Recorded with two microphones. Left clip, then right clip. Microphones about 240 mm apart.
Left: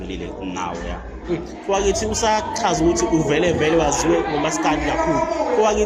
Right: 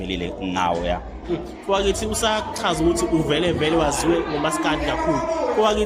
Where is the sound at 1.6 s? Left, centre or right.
Centre.